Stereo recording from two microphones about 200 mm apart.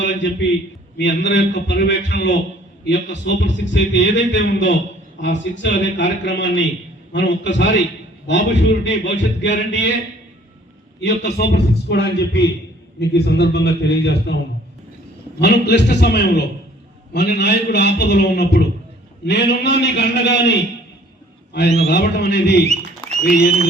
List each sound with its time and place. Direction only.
0.0 s a man's voice: 65° left (ahead or behind)
11.0 s a man's voice: 55° left (ahead or behind)
15.4 s a man's voice: 55° left (ahead or behind)
21.8 s a man's voice: 55° left (ahead or behind)